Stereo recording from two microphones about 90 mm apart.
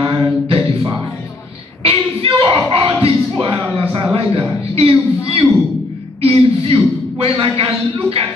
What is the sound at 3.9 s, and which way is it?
Speech, 85° right.